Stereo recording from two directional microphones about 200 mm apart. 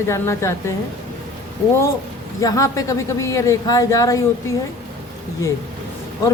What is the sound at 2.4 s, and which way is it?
A woman's voice, 15° left (ahead or behind).